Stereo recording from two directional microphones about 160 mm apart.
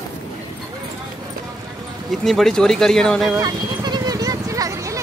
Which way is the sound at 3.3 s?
25° right (ahead or behind).